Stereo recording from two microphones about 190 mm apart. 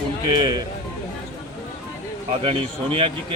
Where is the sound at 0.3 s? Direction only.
25° right (ahead or behind).